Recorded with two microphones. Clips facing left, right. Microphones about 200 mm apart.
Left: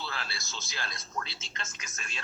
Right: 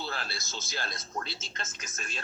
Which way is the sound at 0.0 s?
40° right (ahead or behind).